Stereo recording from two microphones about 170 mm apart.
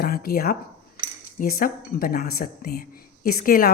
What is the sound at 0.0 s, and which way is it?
A woman's voice, 65° left (ahead or behind).